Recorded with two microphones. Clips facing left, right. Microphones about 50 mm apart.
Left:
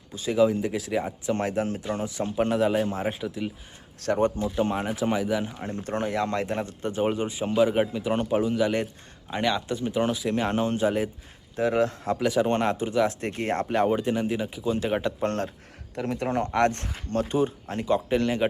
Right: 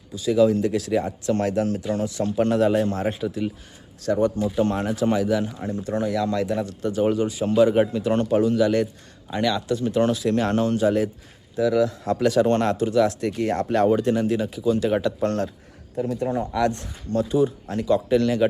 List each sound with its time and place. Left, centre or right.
0.1 s speech: left
0.3 s a man's voice: centre
4.0 s speech: left
4.5 s a man's voice: centre
5.5 s speech: left
7.6 s a man's voice: centre
9.9 s a man's voice: centre
11.5 s speech: left
12.2 s speech: centre; by 13.7 s left
13.7 s a man's voice: centre; by 15.5 s left
16.0 s speech: left